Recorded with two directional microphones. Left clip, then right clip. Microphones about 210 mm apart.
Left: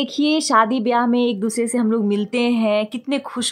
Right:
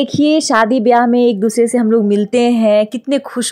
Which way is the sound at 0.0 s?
20° right (ahead or behind).